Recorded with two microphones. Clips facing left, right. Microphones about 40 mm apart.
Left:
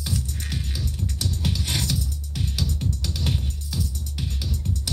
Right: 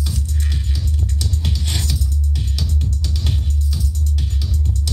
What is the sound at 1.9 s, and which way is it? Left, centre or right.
Music, left.